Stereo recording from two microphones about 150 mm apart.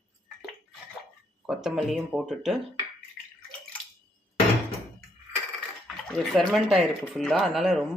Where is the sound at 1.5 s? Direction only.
5° right (ahead or behind).